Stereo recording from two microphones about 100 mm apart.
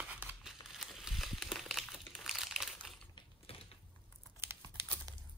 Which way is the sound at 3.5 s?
75° left (ahead or behind).